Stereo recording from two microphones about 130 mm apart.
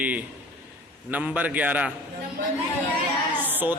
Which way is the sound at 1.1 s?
10° right (ahead or behind).